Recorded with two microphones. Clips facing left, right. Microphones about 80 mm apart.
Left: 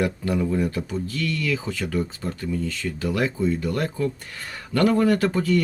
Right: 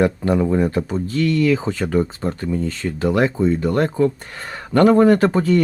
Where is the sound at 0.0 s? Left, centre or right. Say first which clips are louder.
Right 6 dB; right.